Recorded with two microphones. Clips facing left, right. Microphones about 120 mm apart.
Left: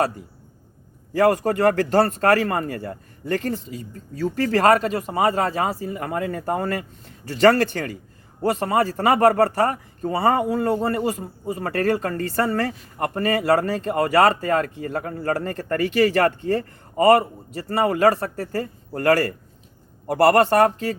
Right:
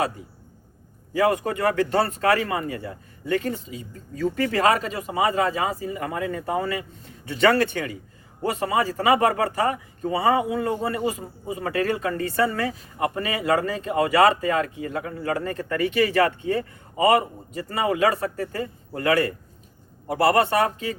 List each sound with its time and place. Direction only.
1.2 s speech: 45° left (ahead or behind)
8.6 s speech: 45° left (ahead or behind)